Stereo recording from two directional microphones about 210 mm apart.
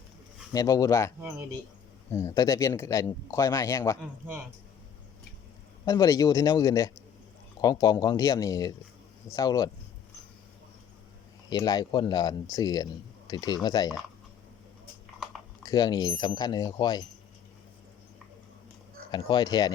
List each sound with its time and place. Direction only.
0.5 s speech: 15° left (ahead or behind)
5.8 s speech: 15° left (ahead or behind)
11.4 s speech: 20° left (ahead or behind)
15.6 s speech: 20° left (ahead or behind)
19.1 s speech: 20° left (ahead or behind)